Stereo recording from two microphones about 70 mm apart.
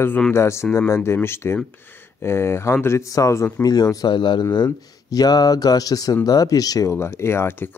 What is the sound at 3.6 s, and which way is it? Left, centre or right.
Speech, left.